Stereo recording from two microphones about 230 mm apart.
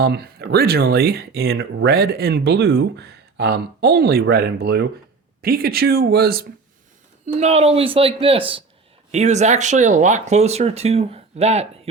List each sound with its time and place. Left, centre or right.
0.0 s speech: right
7.3 s speech: right